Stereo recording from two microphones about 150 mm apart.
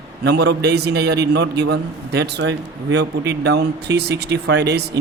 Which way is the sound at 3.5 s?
90° right.